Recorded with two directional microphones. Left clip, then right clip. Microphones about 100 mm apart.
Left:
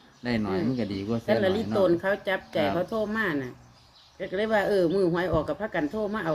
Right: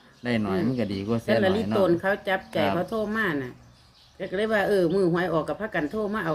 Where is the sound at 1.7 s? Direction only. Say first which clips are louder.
Left 1 dB; 15° right (ahead or behind).